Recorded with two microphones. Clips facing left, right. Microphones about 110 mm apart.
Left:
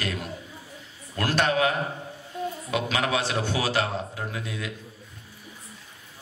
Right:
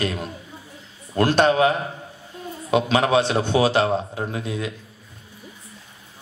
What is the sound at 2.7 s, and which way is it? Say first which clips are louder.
A man's voice: right 9 dB; 30° right (ahead or behind).